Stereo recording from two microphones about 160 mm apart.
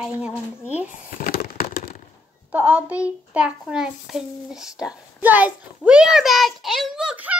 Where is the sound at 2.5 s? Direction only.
10° right (ahead or behind).